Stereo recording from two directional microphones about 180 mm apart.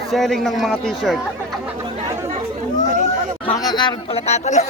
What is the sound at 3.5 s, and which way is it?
Speech, 25° left (ahead or behind).